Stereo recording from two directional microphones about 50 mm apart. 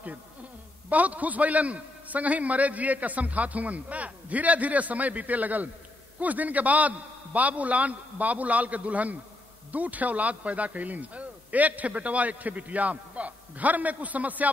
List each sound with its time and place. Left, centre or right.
0.8 s a man's voice: right